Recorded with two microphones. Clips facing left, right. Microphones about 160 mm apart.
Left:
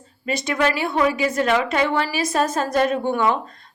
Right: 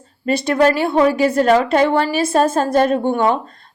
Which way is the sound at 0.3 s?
35° right (ahead or behind).